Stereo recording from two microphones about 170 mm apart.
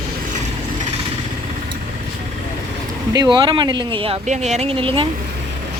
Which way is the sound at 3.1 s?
25° right (ahead or behind).